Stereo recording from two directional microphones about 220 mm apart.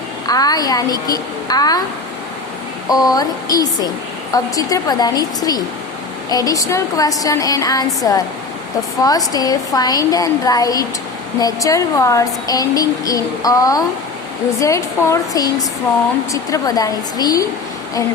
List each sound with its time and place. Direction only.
0.3 s speech: 15° left (ahead or behind)
2.9 s speech: 15° left (ahead or behind)